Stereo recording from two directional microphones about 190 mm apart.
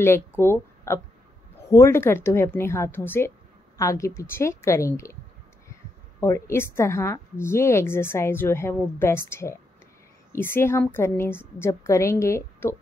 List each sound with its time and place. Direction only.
0.0 s a woman's voice: 10° left (ahead or behind)
6.2 s a woman's voice: 15° left (ahead or behind)